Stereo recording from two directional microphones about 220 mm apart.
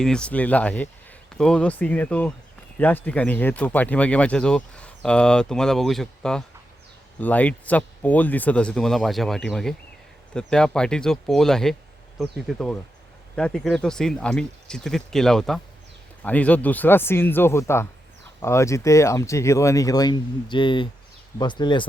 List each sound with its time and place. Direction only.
0.0 s speech: 5° left (ahead or behind); by 21.8 s 20° left (ahead or behind)